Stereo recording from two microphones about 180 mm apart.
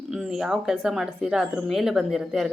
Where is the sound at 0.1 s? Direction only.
Centre (ahead or behind).